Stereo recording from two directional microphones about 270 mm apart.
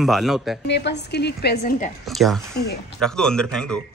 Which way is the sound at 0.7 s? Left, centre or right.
Left.